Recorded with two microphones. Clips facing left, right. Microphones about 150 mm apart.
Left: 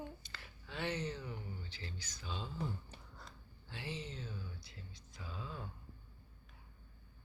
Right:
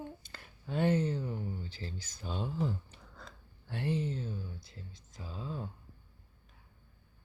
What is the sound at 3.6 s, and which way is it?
Speech, 60° right (ahead or behind).